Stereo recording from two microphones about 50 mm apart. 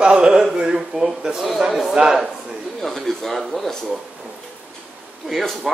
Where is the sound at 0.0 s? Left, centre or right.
Centre.